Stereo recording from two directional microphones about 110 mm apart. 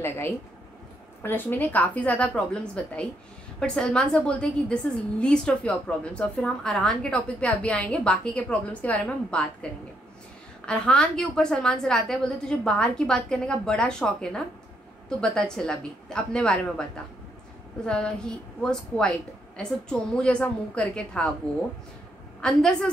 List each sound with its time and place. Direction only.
0.0 s a woman's voice: 20° left (ahead or behind)
17.8 s a woman's voice: 10° left (ahead or behind)
22.4 s a woman's voice: 5° left (ahead or behind)